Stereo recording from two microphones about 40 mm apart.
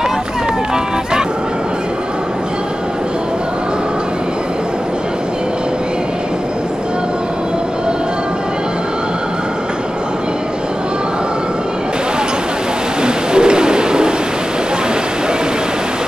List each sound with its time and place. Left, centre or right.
13.0 s bird: right